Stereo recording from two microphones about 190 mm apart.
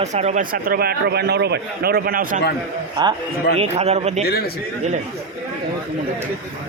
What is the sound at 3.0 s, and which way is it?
Speech, 25° right (ahead or behind).